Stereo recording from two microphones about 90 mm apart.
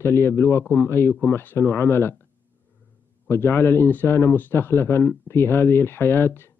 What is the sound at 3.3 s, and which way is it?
A man's voice, 25° left (ahead or behind).